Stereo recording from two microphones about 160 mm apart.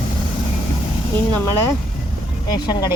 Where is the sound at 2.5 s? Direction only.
25° left (ahead or behind).